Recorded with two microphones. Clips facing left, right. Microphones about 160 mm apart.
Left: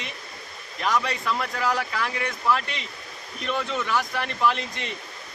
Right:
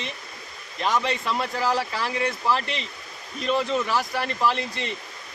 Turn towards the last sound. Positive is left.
turn(degrees=-35)  # may be behind; listen again after turning